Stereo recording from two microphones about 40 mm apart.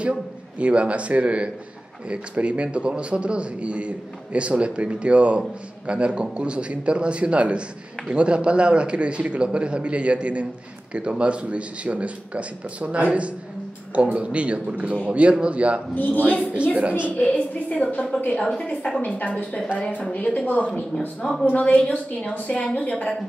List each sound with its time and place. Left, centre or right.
0.6 s a man's voice: right
16.1 s a man's voice: right
16.5 s a man's voice: right
17.2 s a woman's voice: left
18.9 s a woman's voice: left